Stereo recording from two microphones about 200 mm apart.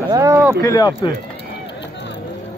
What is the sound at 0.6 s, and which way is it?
Speech, 15° left (ahead or behind).